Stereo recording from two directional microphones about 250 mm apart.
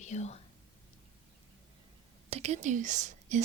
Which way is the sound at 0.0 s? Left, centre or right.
Left.